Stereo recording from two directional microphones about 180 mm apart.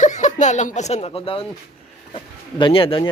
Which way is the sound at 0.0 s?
40° left (ahead or behind).